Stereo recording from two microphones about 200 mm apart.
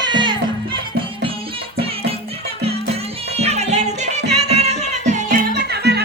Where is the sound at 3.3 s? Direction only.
30° right (ahead or behind).